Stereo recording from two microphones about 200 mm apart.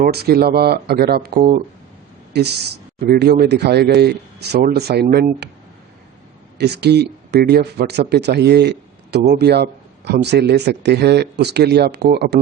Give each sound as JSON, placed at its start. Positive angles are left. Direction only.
{"t": 0.0, "sound": "speech", "side_deg": -50}
{"t": 6.6, "sound": "speech", "side_deg": -55}